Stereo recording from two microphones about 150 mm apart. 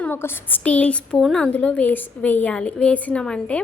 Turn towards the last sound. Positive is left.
turn(degrees=5)  # may be behind; listen again after turning